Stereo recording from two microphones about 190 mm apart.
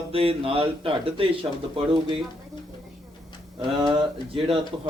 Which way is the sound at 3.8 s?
25° right (ahead or behind).